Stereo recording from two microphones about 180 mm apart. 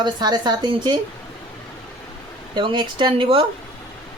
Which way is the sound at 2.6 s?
25° right (ahead or behind).